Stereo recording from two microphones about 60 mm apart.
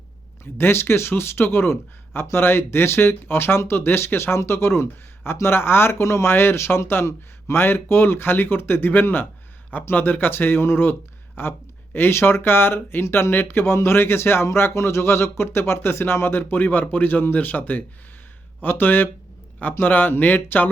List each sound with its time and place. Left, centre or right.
0.6 s speech: left
11.9 s speech: left